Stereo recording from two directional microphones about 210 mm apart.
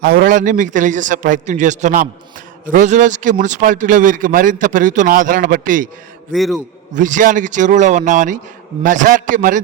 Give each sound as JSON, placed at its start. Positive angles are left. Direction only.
{"t": 0.0, "sound": "a man's voice", "side_deg": -45}
{"t": 6.3, "sound": "a man's voice", "side_deg": 0}
{"t": 6.9, "sound": "a man's voice", "side_deg": -35}